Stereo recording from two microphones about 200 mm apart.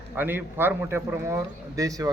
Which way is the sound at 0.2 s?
10° right (ahead or behind).